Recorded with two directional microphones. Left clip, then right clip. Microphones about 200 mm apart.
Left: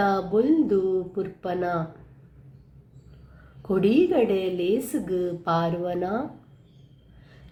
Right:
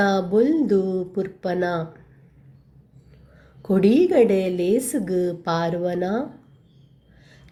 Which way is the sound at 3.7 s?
25° right (ahead or behind).